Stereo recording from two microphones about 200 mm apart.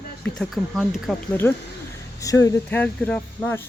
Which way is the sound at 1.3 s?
10° left (ahead or behind).